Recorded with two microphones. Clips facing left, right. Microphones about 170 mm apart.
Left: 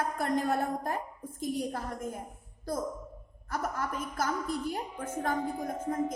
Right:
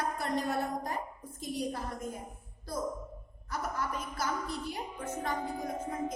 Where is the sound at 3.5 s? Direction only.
50° left (ahead or behind).